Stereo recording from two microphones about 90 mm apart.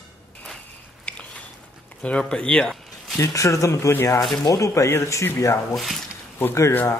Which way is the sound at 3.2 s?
35° left (ahead or behind).